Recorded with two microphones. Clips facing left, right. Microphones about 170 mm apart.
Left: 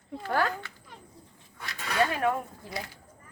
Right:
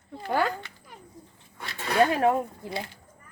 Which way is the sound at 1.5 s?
30° right (ahead or behind).